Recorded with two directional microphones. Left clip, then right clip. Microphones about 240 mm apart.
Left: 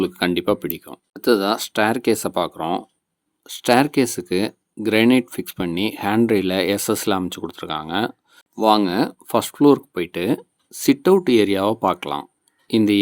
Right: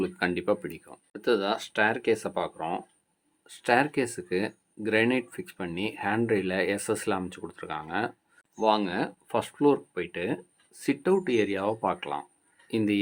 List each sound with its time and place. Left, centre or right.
0.0 s speech: left